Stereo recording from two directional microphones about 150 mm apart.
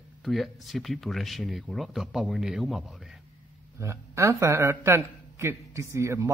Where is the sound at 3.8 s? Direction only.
20° right (ahead or behind).